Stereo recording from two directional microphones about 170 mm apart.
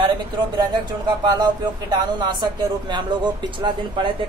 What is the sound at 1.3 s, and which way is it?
Speech, 25° right (ahead or behind).